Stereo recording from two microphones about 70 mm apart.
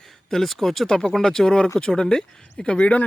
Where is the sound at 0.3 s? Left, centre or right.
Centre.